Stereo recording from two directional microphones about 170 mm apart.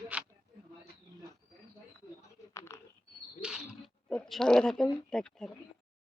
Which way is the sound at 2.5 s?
15° left (ahead or behind).